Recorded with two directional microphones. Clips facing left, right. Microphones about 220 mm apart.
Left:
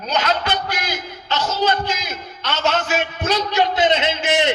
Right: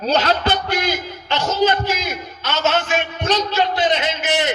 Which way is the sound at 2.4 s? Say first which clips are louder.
Right 1 dB; centre (ahead or behind).